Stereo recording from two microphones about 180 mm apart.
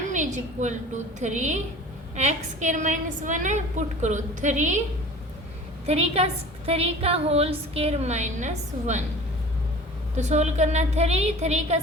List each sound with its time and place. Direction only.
0.1 s a sound: 45° right (ahead or behind)
1.2 s a woman's voice: 40° right (ahead or behind)
5.8 s a woman's voice: 35° right (ahead or behind)
10.2 s a woman's voice: 40° right (ahead or behind)